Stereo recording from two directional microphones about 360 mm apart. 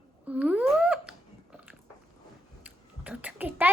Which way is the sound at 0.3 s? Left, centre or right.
Centre.